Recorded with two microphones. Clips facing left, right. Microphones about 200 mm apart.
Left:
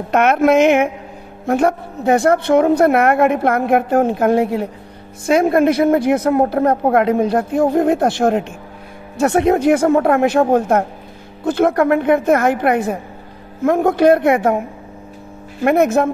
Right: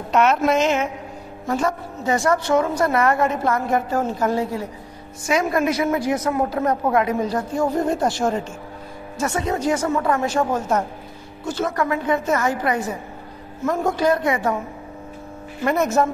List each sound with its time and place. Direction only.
0.1 s a woman's voice: 55° left (ahead or behind)
15.6 s a woman's voice: 60° left (ahead or behind)